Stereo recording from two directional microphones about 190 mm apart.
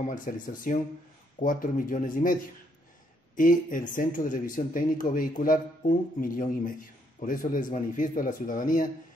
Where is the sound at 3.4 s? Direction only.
45° left (ahead or behind).